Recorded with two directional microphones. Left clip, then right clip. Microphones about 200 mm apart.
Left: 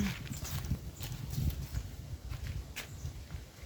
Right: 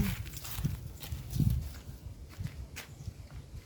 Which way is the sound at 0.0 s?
25° right (ahead or behind).